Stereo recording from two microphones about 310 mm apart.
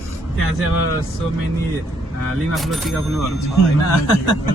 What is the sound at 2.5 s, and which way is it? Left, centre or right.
Speech, centre.